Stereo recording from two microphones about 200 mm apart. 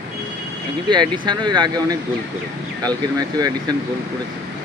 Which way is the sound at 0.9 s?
20° right (ahead or behind).